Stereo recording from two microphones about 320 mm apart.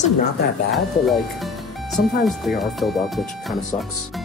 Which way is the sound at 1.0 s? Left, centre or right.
Centre.